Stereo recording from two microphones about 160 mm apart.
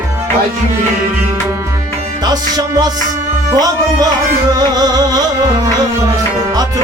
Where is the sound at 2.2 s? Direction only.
25° right (ahead or behind).